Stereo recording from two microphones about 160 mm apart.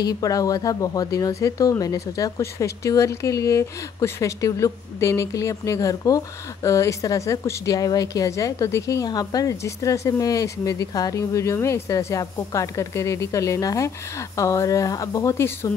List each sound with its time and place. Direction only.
0.0 s speech: 25° left (ahead or behind)